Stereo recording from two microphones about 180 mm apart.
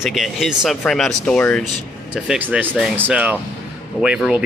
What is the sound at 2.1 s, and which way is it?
Speech, 5° right (ahead or behind).